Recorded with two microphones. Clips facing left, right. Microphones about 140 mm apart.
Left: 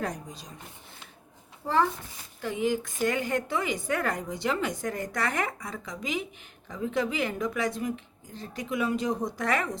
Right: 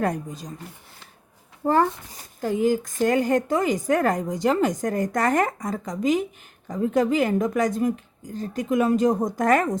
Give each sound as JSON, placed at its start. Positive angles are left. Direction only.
{"t": 0.0, "sound": "speech", "side_deg": -55}
{"t": 1.6, "sound": "a woman's voice", "side_deg": -50}